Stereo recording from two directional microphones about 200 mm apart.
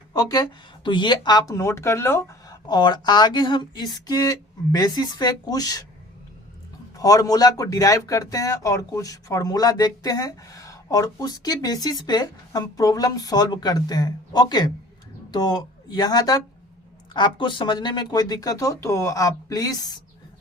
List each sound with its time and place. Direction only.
0.1 s speech: 20° left (ahead or behind)
6.9 s speech: 20° left (ahead or behind)